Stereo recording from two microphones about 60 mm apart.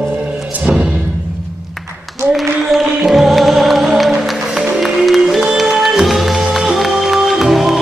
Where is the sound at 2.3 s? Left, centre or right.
Centre.